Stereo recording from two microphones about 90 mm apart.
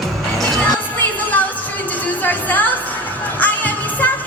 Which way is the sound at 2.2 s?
20° left (ahead or behind).